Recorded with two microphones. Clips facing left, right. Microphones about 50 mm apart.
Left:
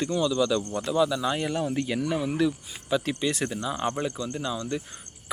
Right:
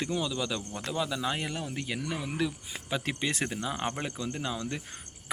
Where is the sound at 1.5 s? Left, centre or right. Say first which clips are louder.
Left 8 dB; centre.